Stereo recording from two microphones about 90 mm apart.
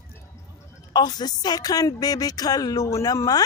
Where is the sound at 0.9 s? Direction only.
50° left (ahead or behind).